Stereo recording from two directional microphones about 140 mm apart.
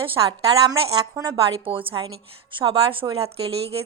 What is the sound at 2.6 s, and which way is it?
Speech, 40° right (ahead or behind).